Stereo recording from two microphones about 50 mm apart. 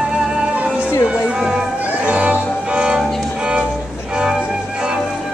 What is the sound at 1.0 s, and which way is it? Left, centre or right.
Music, centre.